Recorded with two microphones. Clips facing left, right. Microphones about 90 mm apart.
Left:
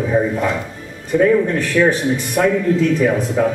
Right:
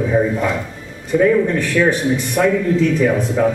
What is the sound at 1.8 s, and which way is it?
Speech, 15° left (ahead or behind).